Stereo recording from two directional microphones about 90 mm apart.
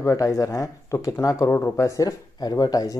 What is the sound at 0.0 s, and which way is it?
Speech, 40° left (ahead or behind).